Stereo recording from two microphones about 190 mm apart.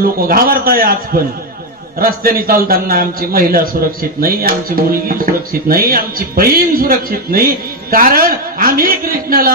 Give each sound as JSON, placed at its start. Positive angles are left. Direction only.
{"t": 0.0, "sound": "speech", "side_deg": -50}